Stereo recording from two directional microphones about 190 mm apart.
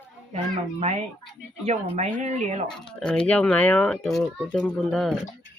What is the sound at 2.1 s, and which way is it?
Speech, 35° right (ahead or behind).